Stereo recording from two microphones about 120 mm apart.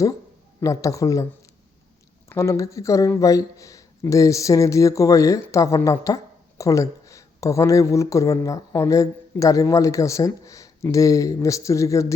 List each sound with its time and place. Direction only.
0.6 s speech: 25° left (ahead or behind)
2.3 s speech: 25° left (ahead or behind)